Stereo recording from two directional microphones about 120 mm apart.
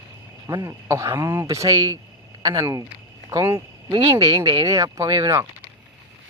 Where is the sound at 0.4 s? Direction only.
25° right (ahead or behind).